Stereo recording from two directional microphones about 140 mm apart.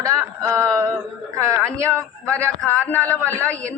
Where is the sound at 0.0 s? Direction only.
25° right (ahead or behind).